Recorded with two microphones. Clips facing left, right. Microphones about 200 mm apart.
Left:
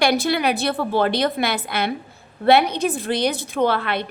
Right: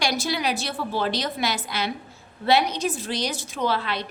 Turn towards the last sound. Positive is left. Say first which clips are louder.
# left 5 dB
turn(degrees=55)  # may be behind; listen again after turning